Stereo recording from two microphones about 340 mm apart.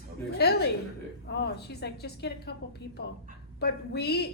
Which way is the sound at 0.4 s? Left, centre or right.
Left.